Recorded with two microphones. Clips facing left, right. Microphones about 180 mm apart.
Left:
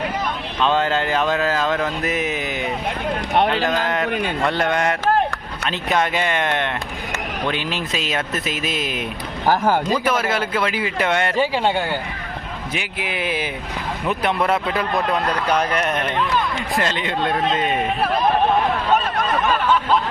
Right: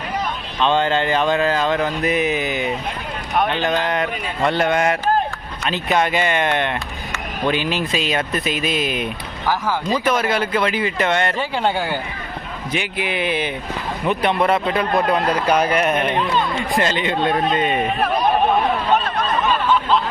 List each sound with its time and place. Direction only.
0.6 s speech: 5° left (ahead or behind)
9.5 s speech: 55° left (ahead or behind)
10.0 s speech: 5° left (ahead or behind); by 16.6 s 20° right (ahead or behind)
16.7 s speech: centre (ahead or behind)